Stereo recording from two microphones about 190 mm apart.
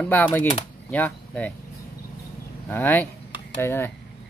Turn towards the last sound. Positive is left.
turn(degrees=10)  # may be behind; listen again after turning